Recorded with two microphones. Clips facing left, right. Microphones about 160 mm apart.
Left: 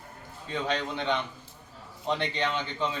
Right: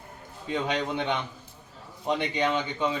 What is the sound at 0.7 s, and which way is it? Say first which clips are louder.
A man's voice: left 1 dB; 15° right (ahead or behind).